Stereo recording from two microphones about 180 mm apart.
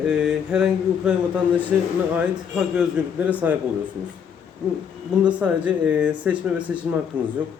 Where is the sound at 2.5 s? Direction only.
5° right (ahead or behind).